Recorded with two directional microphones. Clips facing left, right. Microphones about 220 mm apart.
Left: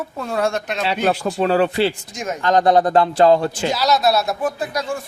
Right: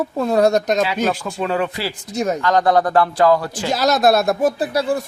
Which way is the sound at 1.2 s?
45° left (ahead or behind).